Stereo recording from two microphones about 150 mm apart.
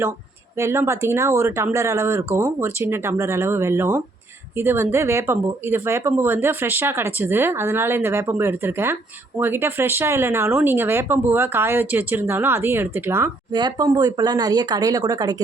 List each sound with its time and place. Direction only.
0.5 s speech: 15° right (ahead or behind)
13.5 s speech: 30° right (ahead or behind)